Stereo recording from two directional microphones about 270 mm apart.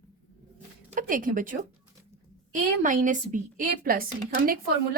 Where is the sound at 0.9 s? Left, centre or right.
Right.